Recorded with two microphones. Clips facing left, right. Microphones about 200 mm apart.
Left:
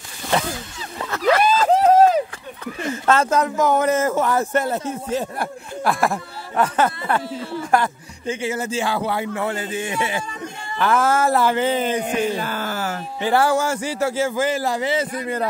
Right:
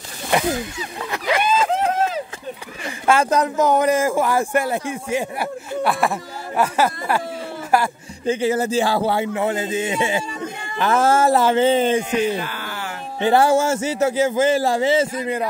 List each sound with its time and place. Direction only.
0.3 s a man's voice: 15° right (ahead or behind)
1.4 s vehicle: 40° left (ahead or behind)
2.9 s a man's voice: 15° right (ahead or behind)
8.3 s a man's voice: 35° right (ahead or behind)
12.4 s a sound: 40° left (ahead or behind)
13.2 s a man's voice: 25° right (ahead or behind)